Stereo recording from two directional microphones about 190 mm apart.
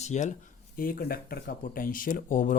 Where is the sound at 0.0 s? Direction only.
40° left (ahead or behind).